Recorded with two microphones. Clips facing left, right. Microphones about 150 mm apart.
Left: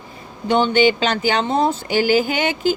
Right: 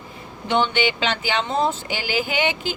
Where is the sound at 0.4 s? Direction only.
40° left (ahead or behind).